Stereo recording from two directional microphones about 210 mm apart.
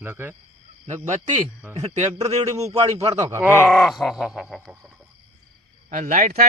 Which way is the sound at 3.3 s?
10° right (ahead or behind).